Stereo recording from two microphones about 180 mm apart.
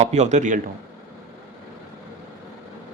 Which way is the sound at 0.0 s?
40° right (ahead or behind).